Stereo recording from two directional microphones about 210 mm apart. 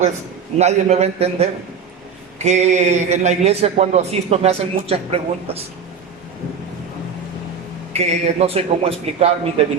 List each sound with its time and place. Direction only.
0.6 s a man's voice: 30° right (ahead or behind)
7.9 s a man's voice: 30° right (ahead or behind)